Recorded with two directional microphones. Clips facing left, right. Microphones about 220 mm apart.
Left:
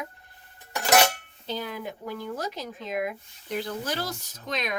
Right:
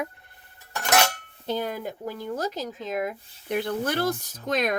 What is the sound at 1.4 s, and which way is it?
Speech, 50° right (ahead or behind).